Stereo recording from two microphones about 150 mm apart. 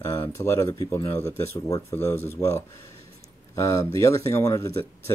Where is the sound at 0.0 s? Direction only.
25° left (ahead or behind).